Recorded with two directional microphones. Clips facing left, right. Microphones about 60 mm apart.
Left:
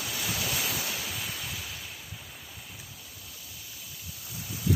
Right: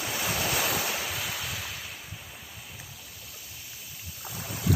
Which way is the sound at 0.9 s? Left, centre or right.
Right.